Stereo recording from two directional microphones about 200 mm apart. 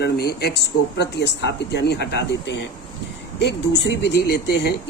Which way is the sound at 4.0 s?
60° left (ahead or behind).